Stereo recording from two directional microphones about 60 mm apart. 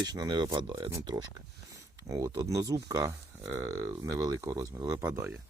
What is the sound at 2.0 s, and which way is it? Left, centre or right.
Speech, right.